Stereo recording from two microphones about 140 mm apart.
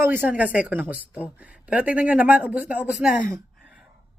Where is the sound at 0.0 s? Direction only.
15° right (ahead or behind).